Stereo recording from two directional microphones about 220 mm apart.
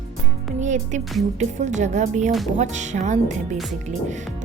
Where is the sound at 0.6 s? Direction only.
35° right (ahead or behind).